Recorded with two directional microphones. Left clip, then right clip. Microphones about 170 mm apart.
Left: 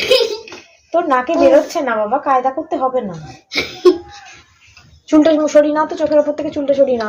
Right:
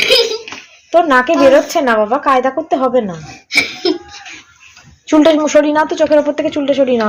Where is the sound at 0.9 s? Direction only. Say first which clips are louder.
Right 4 dB; 65° right (ahead or behind).